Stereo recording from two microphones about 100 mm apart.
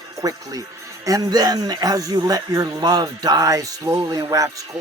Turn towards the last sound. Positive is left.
turn(degrees=-35)  # may be behind; listen again after turning